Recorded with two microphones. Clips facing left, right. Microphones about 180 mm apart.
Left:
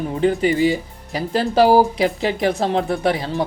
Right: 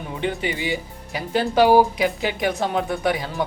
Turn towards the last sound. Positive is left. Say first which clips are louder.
# left 3 dB
turn(degrees=30)  # may be behind; listen again after turning